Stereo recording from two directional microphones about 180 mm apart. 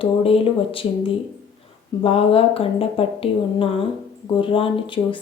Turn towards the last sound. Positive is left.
turn(degrees=30)  # may be behind; listen again after turning